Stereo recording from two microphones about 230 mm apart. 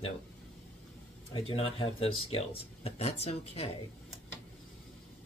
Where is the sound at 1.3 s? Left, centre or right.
Left.